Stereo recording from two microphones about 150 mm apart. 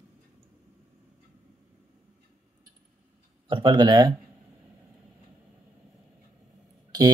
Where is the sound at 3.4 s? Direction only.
35° right (ahead or behind).